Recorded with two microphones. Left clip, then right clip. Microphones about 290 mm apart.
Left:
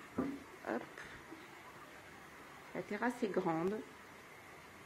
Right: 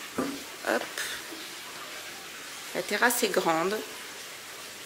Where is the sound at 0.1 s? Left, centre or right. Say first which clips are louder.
Right 8 dB; centre.